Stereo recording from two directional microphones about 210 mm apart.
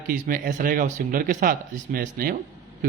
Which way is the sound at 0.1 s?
40° right (ahead or behind).